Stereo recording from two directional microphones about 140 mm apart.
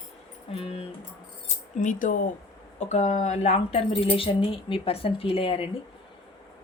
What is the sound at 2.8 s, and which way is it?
Speech, 55° left (ahead or behind).